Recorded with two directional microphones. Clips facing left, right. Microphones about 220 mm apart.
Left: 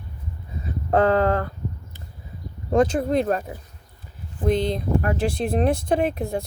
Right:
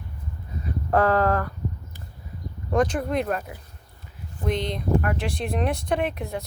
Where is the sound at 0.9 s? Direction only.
25° left (ahead or behind).